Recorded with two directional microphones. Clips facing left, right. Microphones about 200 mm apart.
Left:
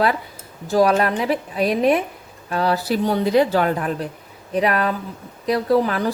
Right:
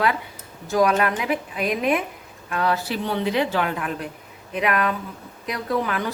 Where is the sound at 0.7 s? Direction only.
35° left (ahead or behind).